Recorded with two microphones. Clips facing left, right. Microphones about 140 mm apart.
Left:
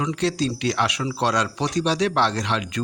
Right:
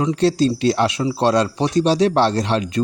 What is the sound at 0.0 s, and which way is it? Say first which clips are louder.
Speech: right 6 dB; 35° right (ahead or behind).